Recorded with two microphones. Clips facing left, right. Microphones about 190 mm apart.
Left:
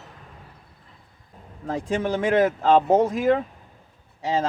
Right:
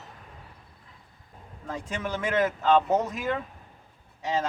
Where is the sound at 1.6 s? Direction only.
35° left (ahead or behind).